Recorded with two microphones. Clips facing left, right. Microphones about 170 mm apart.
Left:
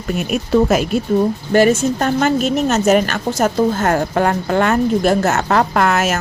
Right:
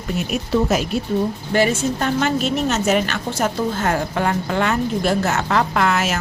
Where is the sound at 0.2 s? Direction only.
55° left (ahead or behind).